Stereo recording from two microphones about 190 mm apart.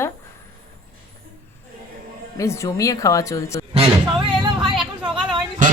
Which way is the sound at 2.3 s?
15° left (ahead or behind).